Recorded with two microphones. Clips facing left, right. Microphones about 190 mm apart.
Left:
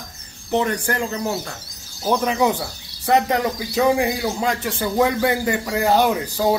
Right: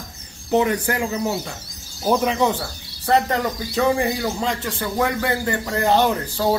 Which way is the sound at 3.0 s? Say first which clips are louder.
Left 1 dB; 10° left (ahead or behind).